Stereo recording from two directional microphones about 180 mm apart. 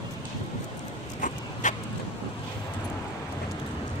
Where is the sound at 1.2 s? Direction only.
45° left (ahead or behind).